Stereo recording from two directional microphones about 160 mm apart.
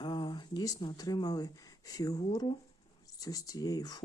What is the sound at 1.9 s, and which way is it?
Speech, 25° left (ahead or behind).